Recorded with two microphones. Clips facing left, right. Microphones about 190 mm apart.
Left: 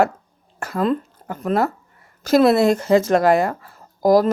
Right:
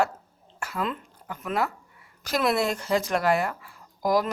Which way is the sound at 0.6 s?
45° left (ahead or behind).